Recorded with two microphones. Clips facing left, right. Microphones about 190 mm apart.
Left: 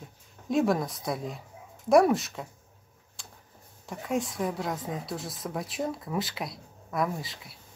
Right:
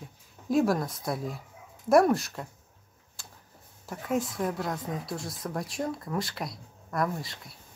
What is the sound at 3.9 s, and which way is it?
Speech, centre (ahead or behind).